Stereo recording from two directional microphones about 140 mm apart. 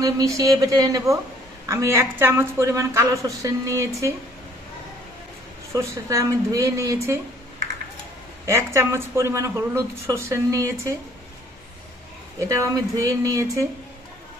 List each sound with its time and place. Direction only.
0.0 s speech: 25° right (ahead or behind)
5.7 s speech: 20° right (ahead or behind)
8.5 s speech: 20° right (ahead or behind)
12.4 s speech: 20° right (ahead or behind)